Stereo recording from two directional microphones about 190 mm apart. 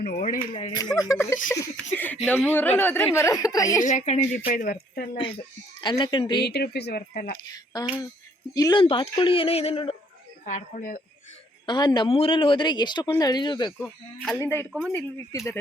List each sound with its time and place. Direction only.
0.0 s speech: 50° left (ahead or behind)
0.9 s a woman's voice: 15° left (ahead or behind)
3.8 s a woman's voice: 40° left (ahead or behind)
4.4 s speech: 50° left (ahead or behind)
5.8 s speech: 25° left (ahead or behind)
6.4 s speech: 60° left (ahead or behind)
7.3 s speech: 20° left (ahead or behind)
10.4 s speech: 40° left (ahead or behind)
11.6 s speech: 20° left (ahead or behind)
13.7 s a woman's voice: 5° left (ahead or behind)
14.7 s speech: centre (ahead or behind)
15.3 s a woman's voice: 15° left (ahead or behind)